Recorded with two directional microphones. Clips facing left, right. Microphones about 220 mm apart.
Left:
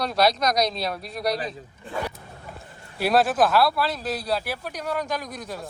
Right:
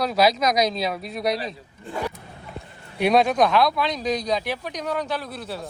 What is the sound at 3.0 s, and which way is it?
Speech, 5° left (ahead or behind).